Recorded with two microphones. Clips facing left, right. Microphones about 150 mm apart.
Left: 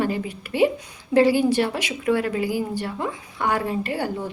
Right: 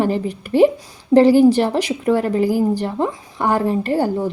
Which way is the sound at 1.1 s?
30° right (ahead or behind).